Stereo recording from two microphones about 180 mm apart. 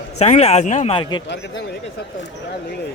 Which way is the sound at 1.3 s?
75° left (ahead or behind).